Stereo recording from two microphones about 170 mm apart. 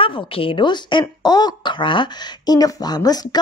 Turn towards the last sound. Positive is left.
turn(degrees=20)  # may be behind; listen again after turning